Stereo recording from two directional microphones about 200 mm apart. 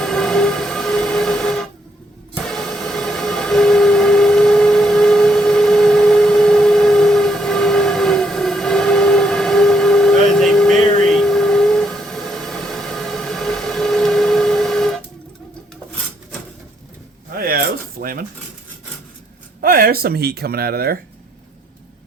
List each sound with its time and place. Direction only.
0.0 s train: centre (ahead or behind)
17.3 s zipper: 50° right (ahead or behind)
18.0 s dishes: 45° right (ahead or behind)
19.6 s speech: 45° right (ahead or behind)